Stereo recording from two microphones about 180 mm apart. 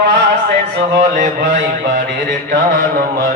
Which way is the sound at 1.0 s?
45° right (ahead or behind).